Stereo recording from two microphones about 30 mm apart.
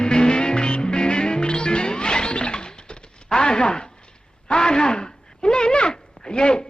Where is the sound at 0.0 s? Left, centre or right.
Left.